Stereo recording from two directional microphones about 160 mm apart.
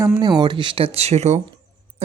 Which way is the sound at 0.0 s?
25° right (ahead or behind).